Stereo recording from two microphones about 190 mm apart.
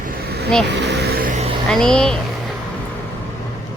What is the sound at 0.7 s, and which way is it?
Vehicle, 65° right (ahead or behind).